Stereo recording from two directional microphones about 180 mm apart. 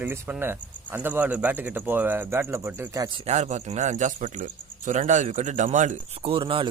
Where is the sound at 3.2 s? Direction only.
40° right (ahead or behind).